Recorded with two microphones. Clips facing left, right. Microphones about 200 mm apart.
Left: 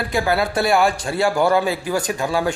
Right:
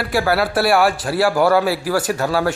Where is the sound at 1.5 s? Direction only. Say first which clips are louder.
Right 2 dB; 20° left (ahead or behind).